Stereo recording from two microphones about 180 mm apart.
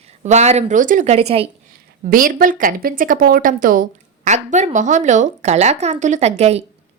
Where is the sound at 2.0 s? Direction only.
50° right (ahead or behind).